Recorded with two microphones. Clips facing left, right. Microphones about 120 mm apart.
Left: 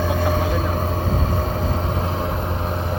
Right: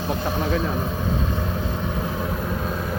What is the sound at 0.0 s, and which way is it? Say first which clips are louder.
Vehicle: left 4 dB; 50° left (ahead or behind).